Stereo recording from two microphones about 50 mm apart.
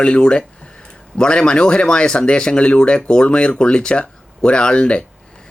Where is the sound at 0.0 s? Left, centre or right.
Centre.